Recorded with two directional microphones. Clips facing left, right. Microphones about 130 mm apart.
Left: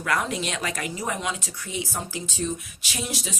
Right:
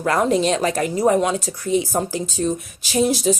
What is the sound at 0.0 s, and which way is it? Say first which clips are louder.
Speech: right 9 dB; 35° right (ahead or behind).